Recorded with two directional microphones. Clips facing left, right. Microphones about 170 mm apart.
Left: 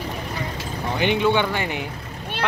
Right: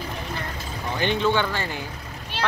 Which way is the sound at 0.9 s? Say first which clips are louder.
Left 3 dB; 15° left (ahead or behind).